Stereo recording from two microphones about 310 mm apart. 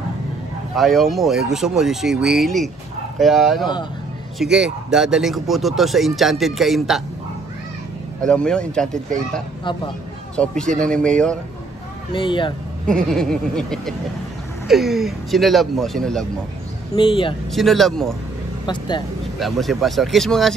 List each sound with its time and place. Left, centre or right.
0.7 s speech: centre
8.2 s speech: centre
12.1 s speech: centre
12.8 s speech: centre
16.9 s speech: centre
17.5 s speech: centre
18.7 s speech: centre
19.3 s speech: centre